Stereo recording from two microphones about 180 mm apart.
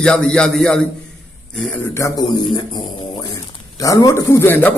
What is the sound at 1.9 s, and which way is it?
A man's voice, 20° left (ahead or behind).